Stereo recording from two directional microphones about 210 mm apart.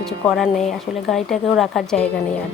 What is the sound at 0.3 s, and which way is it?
A woman's voice, centre (ahead or behind).